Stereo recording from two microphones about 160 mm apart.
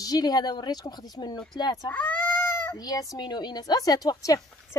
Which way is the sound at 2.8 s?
25° left (ahead or behind).